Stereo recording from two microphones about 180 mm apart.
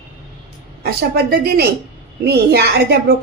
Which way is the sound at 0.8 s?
60° right (ahead or behind).